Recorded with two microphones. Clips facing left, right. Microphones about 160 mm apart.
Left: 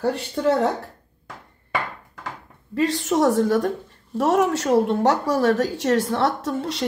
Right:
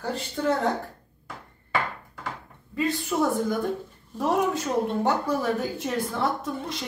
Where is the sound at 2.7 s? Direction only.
85° left.